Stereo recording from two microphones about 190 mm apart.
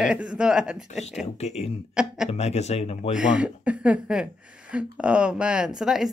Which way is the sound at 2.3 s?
35° left (ahead or behind).